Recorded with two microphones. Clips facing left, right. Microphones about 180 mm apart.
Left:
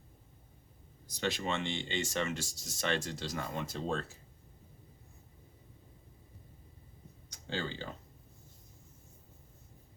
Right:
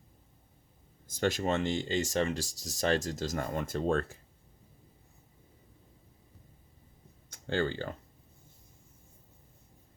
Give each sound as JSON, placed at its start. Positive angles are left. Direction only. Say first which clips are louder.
{"t": 1.0, "sound": "speech", "louder": "right 5 dB", "side_deg": -50}
{"t": 7.3, "sound": "speech", "louder": "right 7 dB", "side_deg": -55}